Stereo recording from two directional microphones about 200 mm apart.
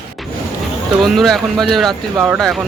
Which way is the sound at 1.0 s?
Centre (ahead or behind).